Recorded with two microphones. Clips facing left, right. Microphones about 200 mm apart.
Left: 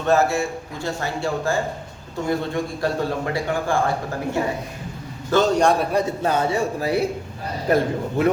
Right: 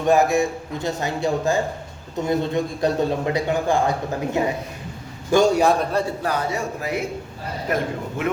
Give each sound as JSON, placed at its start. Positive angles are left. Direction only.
{"t": 0.0, "sound": "a man's voice", "side_deg": -15}
{"t": 5.8, "sound": "a man's voice", "side_deg": 15}
{"t": 6.2, "sound": "a man's voice", "side_deg": 25}